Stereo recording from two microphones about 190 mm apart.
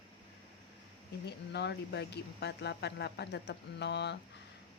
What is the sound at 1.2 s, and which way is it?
Speech, 60° left (ahead or behind).